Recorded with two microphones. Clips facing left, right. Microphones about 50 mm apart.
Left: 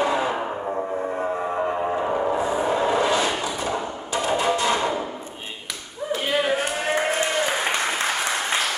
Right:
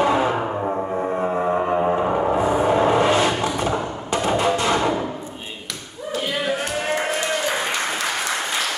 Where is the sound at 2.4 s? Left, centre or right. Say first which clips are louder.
Right 4 dB; right.